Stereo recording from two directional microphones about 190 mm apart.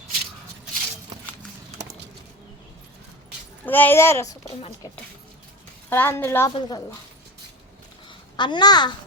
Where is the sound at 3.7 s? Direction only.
10° left (ahead or behind).